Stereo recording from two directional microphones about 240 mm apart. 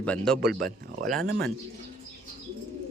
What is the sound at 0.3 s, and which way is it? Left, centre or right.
Speech, right.